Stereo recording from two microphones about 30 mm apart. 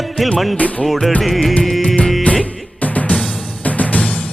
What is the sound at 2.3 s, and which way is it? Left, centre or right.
Music, left.